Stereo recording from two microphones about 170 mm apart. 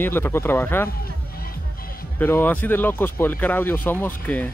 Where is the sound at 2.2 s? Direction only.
10° left (ahead or behind).